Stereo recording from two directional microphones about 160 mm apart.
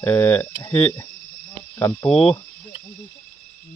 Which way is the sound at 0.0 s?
15° left (ahead or behind).